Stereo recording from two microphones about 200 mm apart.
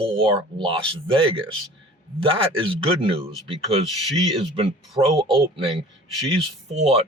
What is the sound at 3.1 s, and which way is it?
Speech, 30° right (ahead or behind).